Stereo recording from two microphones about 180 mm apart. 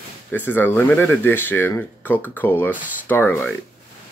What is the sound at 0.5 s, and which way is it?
Speech, 10° left (ahead or behind).